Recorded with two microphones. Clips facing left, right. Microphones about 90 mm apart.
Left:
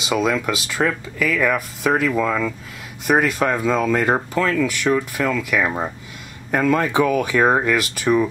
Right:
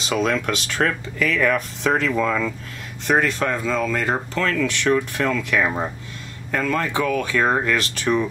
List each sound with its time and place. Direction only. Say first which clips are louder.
0.0 s speech: left 2 dB; 5° left (ahead or behind)
6.5 s speech: left 4 dB; 15° left (ahead or behind)